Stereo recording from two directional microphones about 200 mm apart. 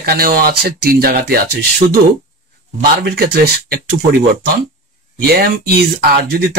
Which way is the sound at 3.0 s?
50° right (ahead or behind).